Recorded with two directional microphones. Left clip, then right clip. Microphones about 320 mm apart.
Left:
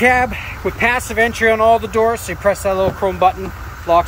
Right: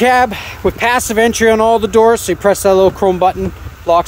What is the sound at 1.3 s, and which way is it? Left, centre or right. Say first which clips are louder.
Speech: even; right.